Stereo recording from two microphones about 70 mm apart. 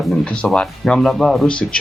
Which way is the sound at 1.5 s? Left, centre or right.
Centre.